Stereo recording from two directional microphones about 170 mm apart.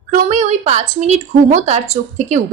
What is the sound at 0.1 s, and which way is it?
A woman's voice, 45° right (ahead or behind).